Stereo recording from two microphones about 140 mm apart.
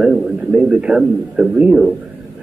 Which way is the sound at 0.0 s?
5° right (ahead or behind).